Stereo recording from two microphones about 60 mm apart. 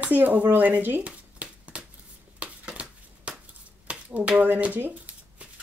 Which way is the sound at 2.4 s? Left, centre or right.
Centre.